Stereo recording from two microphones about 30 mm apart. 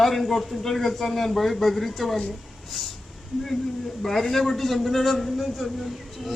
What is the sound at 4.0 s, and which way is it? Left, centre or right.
A man's voice, centre.